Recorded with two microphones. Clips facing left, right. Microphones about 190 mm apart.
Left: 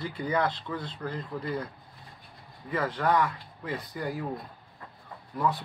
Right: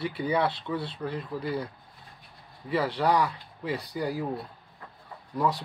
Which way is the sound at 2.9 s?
10° right (ahead or behind).